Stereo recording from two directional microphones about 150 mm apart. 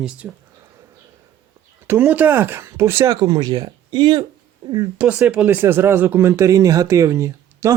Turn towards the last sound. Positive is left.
turn(degrees=-20)  # may be behind; listen again after turning